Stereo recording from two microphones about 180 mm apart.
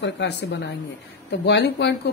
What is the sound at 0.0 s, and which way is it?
Speech, 80° left.